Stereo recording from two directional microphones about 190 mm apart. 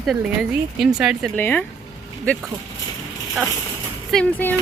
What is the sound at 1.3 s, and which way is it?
Speech, 10° left (ahead or behind).